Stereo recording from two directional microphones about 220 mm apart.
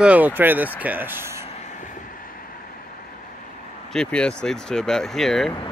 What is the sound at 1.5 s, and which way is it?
Vehicle, 30° left (ahead or behind).